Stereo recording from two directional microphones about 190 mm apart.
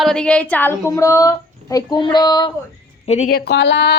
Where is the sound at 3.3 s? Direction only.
65° left (ahead or behind).